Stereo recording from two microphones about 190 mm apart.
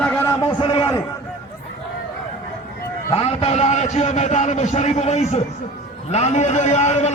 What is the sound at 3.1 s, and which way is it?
A man's voice, 30° left (ahead or behind).